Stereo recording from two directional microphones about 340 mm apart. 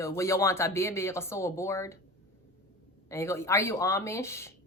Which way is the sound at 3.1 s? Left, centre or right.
Centre.